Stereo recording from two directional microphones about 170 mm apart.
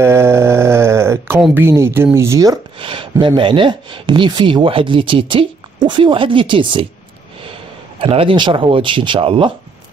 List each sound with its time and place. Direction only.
0.0 s a sound: 15° right (ahead or behind)
1.5 s speech: 15° right (ahead or behind); by 6.9 s 30° right (ahead or behind)
8.0 s speech: 30° right (ahead or behind)